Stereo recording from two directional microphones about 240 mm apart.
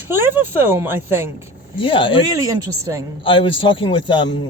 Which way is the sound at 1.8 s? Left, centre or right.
Left.